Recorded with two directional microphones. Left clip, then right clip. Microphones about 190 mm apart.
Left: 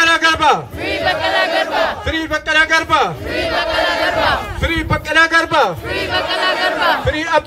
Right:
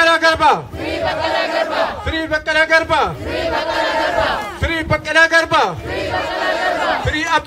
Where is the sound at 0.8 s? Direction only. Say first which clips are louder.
Left 3 dB; 35° left (ahead or behind).